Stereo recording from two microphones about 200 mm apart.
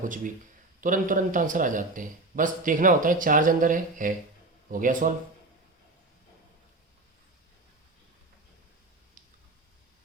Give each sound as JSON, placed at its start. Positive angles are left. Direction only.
{"t": 0.8, "sound": "a man's voice", "side_deg": -40}